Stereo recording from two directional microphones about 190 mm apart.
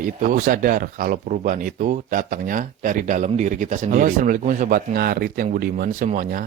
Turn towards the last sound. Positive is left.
turn(degrees=-45)  # may be behind; listen again after turning